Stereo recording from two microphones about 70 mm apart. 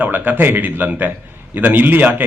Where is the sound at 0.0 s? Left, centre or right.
Right.